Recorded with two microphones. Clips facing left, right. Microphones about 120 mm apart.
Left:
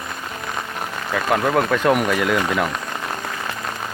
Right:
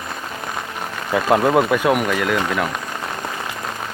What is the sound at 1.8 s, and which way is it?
Speech, 5° right (ahead or behind).